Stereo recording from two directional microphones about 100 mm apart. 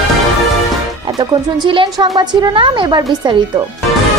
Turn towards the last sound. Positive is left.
turn(degrees=-45)  # may be behind; listen again after turning